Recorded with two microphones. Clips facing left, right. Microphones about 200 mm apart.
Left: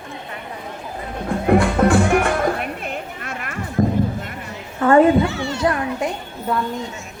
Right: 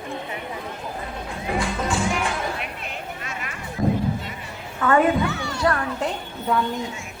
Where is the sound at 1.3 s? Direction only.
55° left (ahead or behind).